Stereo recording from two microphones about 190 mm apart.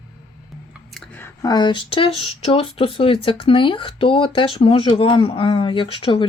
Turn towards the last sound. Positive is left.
turn(degrees=30)  # may be behind; listen again after turning